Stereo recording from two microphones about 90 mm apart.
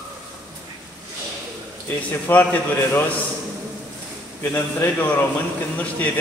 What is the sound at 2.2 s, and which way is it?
Speech, 20° left (ahead or behind).